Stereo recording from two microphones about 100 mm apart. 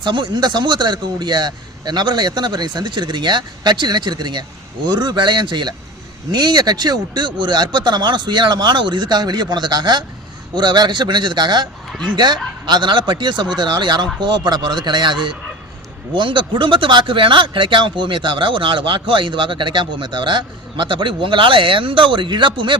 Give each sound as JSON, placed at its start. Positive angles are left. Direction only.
{"t": 0.0, "sound": "a man's voice", "side_deg": -50}